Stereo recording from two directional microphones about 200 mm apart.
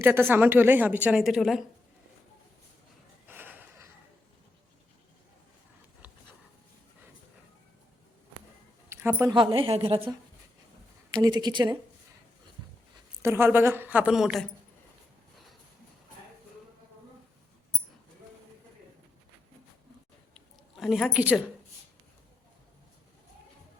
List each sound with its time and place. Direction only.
0.0 s speech: 10° right (ahead or behind)
3.2 s a sound: 10° right (ahead or behind)
8.9 s a sound: 10° right (ahead or behind)
9.3 s a woman's voice: 25° right (ahead or behind)
13.2 s speech: 10° right (ahead or behind)
20.7 s speech: centre (ahead or behind)